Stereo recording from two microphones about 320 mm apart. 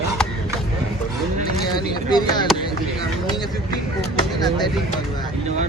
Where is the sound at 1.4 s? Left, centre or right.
Centre.